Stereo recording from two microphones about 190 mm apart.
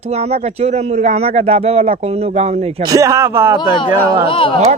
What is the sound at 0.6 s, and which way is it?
A man's voice, 35° right (ahead or behind).